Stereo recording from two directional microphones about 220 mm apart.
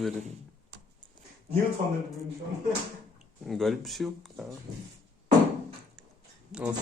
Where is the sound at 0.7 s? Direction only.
50° right (ahead or behind).